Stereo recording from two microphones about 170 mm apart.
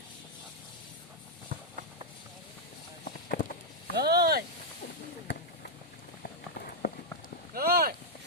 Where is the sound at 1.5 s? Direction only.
55° right (ahead or behind).